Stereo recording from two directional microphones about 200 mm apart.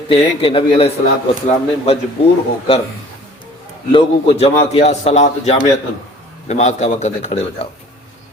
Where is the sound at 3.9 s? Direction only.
30° left (ahead or behind).